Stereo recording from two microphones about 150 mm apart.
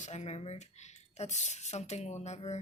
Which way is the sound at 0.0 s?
50° left (ahead or behind).